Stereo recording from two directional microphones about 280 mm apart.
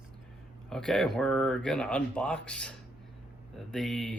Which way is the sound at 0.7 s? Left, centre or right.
Centre.